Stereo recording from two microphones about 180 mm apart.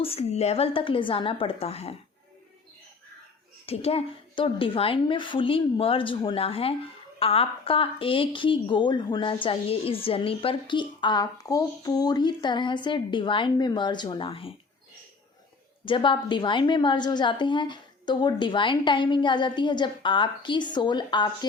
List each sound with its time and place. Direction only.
0.0 s a woman's voice: 35° left (ahead or behind)
3.7 s a woman's voice: 35° left (ahead or behind)
15.8 s a woman's voice: 30° left (ahead or behind)